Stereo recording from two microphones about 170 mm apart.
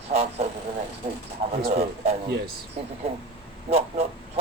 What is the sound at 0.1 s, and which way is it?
Speech, 35° right (ahead or behind).